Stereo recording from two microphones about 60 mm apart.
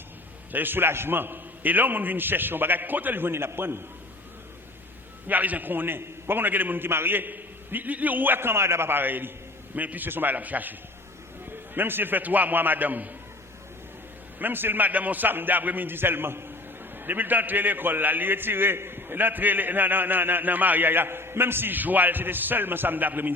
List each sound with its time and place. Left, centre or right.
0.5 s a man's voice: right
5.3 s a man's voice: right
14.3 s a man's voice: right